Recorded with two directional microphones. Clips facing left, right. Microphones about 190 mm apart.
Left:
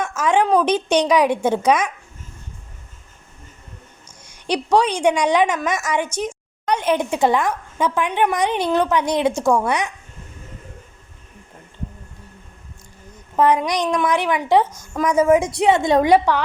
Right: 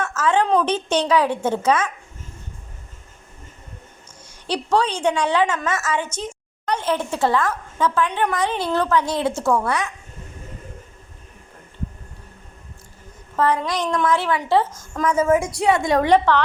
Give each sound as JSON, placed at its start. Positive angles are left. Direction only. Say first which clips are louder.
{"t": 0.0, "sound": "a woman's voice", "louder": "left 1 dB", "side_deg": 15}
{"t": 4.3, "sound": "a woman's voice", "louder": "left 3 dB", "side_deg": 15}
{"t": 13.3, "sound": "a woman's voice", "louder": "left 3 dB", "side_deg": 20}
{"t": 16.0, "sound": "a woman's voice", "louder": "left 1 dB", "side_deg": 10}